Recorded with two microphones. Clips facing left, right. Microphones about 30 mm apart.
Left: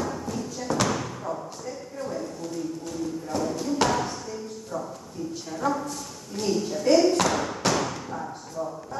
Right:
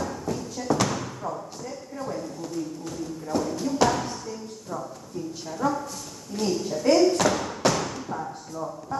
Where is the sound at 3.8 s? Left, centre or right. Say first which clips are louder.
Right 2 dB; centre.